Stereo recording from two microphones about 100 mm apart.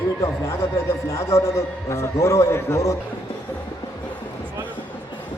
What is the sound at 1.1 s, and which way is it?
A man's voice, 30° left (ahead or behind).